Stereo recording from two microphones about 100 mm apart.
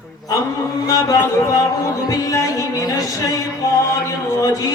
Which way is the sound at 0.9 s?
35° left (ahead or behind).